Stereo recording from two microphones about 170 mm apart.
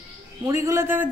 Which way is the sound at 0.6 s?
15° right (ahead or behind).